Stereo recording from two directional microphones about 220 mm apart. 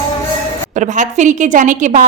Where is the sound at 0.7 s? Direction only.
35° right (ahead or behind).